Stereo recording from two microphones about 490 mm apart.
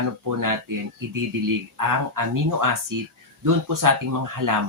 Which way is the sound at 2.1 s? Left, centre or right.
Right.